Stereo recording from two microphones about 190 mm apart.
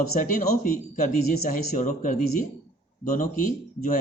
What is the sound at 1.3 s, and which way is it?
Speech, 45° left (ahead or behind).